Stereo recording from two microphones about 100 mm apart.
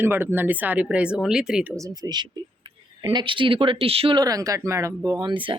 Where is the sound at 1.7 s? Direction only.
35° right (ahead or behind); by 4.1 s 70° right (ahead or behind).